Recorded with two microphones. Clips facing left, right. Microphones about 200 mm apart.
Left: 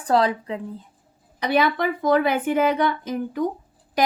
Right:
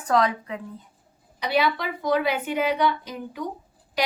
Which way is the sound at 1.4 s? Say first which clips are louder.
Left 3 dB; 50° left (ahead or behind).